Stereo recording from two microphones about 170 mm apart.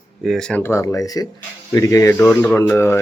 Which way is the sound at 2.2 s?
5° left (ahead or behind).